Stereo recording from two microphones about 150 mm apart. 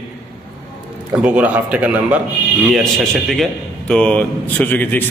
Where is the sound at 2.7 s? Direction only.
5° left (ahead or behind).